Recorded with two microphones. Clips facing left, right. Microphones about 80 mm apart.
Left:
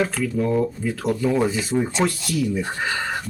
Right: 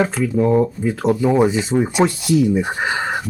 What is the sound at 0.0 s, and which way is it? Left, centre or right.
Speech, right.